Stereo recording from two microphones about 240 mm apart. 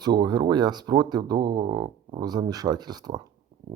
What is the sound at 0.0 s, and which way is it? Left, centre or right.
Speech, centre.